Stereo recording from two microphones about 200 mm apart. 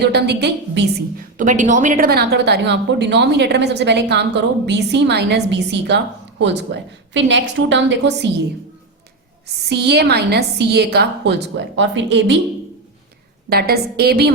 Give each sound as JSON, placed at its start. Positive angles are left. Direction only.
{"t": 0.0, "sound": "speech", "side_deg": -55}
{"t": 1.4, "sound": "speech", "side_deg": -40}
{"t": 9.6, "sound": "speech", "side_deg": -55}
{"t": 13.5, "sound": "a woman's voice", "side_deg": -50}